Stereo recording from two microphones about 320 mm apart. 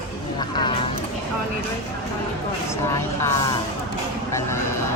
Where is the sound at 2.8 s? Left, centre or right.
Centre.